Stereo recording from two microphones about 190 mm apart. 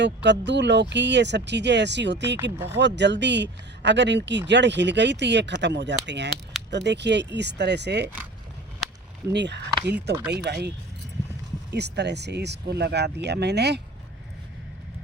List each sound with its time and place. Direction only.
0.0 s speech: 65° right (ahead or behind)
9.3 s speech: 65° right (ahead or behind)
11.7 s speech: 60° right (ahead or behind)